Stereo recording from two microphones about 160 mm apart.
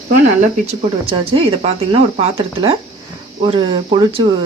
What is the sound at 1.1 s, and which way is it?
Speech, 35° right (ahead or behind).